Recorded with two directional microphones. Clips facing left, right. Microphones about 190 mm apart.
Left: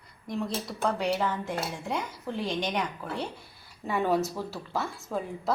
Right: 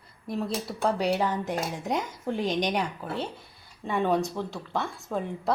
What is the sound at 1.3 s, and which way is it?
A woman's voice, 40° right (ahead or behind).